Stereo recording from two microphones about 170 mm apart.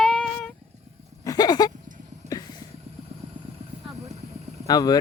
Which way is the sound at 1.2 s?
20° left (ahead or behind).